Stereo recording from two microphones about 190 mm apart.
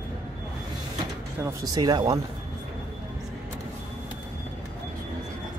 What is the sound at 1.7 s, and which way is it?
Speech, 20° right (ahead or behind).